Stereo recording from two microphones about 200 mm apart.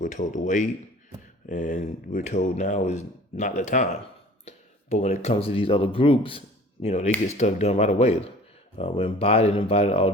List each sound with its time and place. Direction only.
0.0 s speech: 40° left (ahead or behind)